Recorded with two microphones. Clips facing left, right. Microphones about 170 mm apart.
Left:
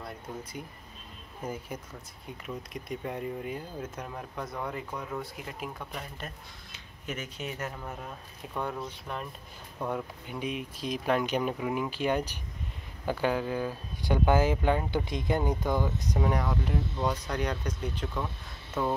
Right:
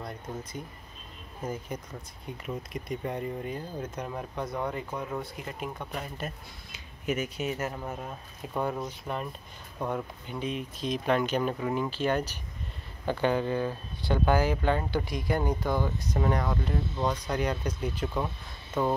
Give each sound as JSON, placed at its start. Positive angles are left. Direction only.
{"t": 0.0, "sound": "speech", "side_deg": 10}
{"t": 8.8, "sound": "speech", "side_deg": -5}
{"t": 18.7, "sound": "speech", "side_deg": 5}